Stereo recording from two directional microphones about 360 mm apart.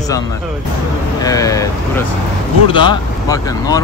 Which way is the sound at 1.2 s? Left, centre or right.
Centre.